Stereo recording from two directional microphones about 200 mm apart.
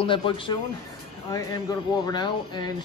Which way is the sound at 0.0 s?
25° left (ahead or behind).